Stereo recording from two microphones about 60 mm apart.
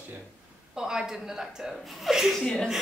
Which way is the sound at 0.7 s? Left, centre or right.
Centre.